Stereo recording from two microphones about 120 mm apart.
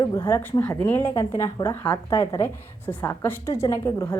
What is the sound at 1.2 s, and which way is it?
A woman's voice, 30° left (ahead or behind).